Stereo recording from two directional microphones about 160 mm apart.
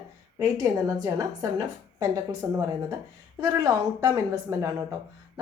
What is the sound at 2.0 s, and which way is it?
A woman's voice, 20° right (ahead or behind).